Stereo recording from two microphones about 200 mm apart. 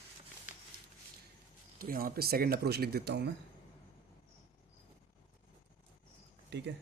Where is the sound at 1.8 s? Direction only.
45° right (ahead or behind).